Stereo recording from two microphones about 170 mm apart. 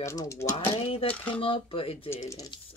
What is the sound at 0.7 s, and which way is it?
Speech, 35° left (ahead or behind).